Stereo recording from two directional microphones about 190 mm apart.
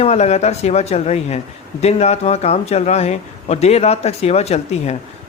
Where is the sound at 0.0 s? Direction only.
35° left (ahead or behind).